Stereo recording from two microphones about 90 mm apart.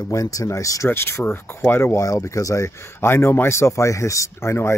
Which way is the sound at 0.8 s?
25° left (ahead or behind).